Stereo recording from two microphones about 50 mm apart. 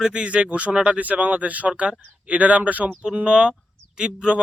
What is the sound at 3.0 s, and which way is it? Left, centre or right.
Speech, centre.